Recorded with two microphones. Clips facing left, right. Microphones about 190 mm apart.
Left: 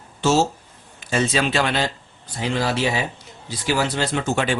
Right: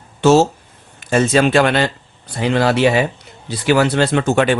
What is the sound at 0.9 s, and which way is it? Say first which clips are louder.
Speech: right 7 dB; 50° right (ahead or behind).